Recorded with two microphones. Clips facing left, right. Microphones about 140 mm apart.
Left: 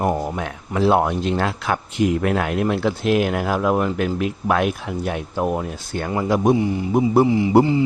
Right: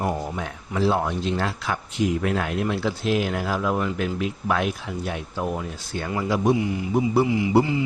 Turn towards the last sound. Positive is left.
turn(degrees=30)  # may be behind; listen again after turning